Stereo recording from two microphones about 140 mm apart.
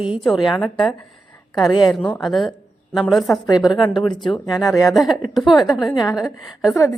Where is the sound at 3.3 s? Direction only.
25° left (ahead or behind).